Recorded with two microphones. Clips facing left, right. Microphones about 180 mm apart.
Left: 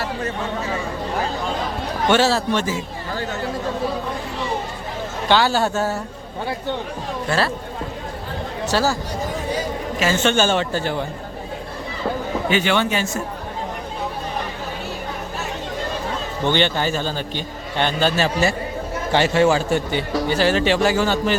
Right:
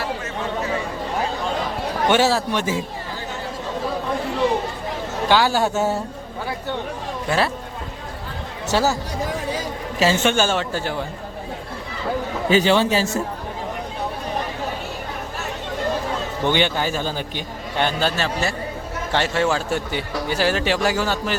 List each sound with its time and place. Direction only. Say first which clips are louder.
2.0 s a man's voice: left 1 dB; 15° right (ahead or behind)
5.3 s a man's voice: left 1 dB; 10° right (ahead or behind)
7.3 s a man's voice: even; 15° right (ahead or behind)
8.7 s speech: right 1 dB; 20° right (ahead or behind)
10.2 s a man's voice: left 1 dB; 5° right (ahead or behind)
12.5 s a man's voice: right 4 dB; 35° right (ahead or behind)
16.5 s a man's voice: left 1 dB; 10° right (ahead or behind)